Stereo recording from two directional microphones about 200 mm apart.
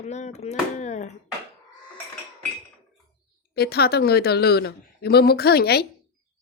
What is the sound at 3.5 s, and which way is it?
A woman's voice, 50° left (ahead or behind).